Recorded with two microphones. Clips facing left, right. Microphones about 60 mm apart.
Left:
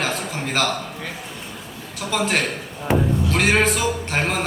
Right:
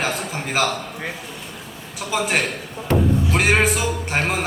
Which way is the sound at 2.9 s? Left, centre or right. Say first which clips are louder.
Even; centre.